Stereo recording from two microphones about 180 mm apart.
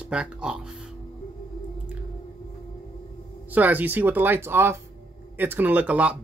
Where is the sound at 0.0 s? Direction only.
5° right (ahead or behind).